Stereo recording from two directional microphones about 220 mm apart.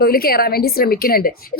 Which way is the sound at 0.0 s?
45° left (ahead or behind).